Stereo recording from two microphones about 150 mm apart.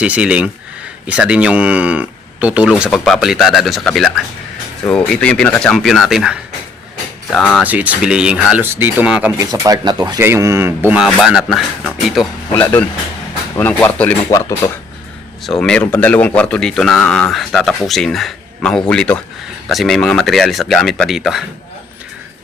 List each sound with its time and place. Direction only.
0.0 s speech: 10° right (ahead or behind)
7.6 s speech: 10° right (ahead or behind)
9.4 s speech: 25° right (ahead or behind)
10.2 s speech: 15° right (ahead or behind)
11.0 s speech: 5° right (ahead or behind)
12.5 s speech: 10° left (ahead or behind)
14.3 s speech: 20° left (ahead or behind)
15.6 s speech: 10° left (ahead or behind)